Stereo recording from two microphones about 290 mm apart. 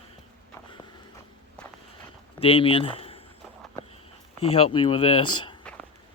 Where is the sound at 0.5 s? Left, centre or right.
Centre.